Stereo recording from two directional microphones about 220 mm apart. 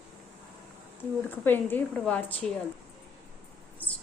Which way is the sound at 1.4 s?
10° left (ahead or behind).